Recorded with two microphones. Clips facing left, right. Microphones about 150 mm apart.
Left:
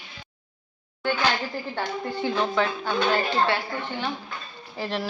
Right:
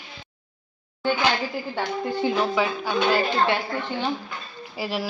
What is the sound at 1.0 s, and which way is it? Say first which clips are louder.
Speech: right 2 dB; 15° right (ahead or behind).